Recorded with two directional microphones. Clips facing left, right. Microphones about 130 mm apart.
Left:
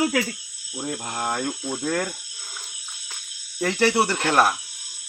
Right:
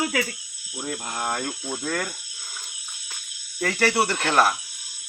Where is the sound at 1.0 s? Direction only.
25° left (ahead or behind).